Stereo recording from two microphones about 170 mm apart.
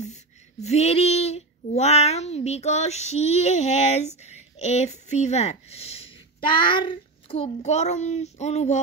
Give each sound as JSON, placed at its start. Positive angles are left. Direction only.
{"t": 0.0, "sound": "speech", "side_deg": 40}